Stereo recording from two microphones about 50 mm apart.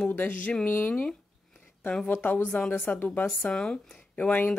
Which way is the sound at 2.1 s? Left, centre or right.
Left.